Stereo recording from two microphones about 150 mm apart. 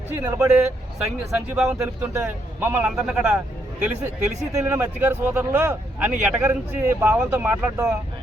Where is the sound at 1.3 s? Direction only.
5° right (ahead or behind).